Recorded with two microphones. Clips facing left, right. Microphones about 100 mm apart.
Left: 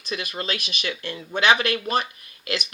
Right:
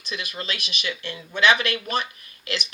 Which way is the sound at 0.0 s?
40° left (ahead or behind).